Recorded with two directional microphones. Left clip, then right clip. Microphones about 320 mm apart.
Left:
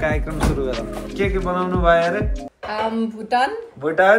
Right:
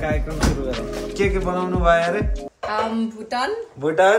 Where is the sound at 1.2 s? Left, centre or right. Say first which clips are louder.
Left 1 dB; centre.